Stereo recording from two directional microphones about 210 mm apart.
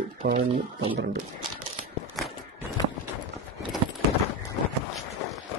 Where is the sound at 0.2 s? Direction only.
45° right (ahead or behind).